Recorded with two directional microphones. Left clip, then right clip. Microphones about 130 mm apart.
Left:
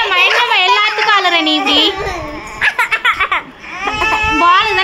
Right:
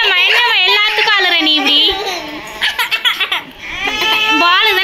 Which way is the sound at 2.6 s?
70° left (ahead or behind).